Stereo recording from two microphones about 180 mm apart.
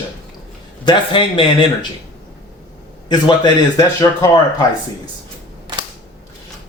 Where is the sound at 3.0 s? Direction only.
25° left (ahead or behind).